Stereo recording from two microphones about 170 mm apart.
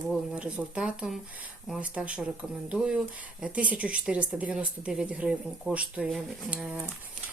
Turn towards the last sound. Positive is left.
turn(degrees=-5)  # may be behind; listen again after turning